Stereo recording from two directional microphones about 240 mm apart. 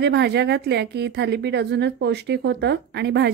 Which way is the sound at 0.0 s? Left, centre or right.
Right.